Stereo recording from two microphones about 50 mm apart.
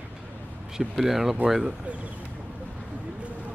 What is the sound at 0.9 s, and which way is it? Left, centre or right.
Speech, centre.